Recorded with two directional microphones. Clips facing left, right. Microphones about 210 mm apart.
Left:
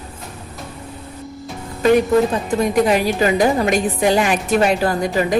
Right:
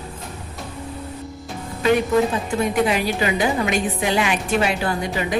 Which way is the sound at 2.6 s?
40° left (ahead or behind).